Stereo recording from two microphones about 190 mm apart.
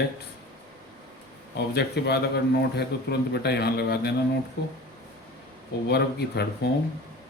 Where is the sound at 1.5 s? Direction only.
60° left (ahead or behind).